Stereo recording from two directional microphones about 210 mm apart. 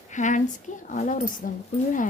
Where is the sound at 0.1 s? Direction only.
35° left (ahead or behind).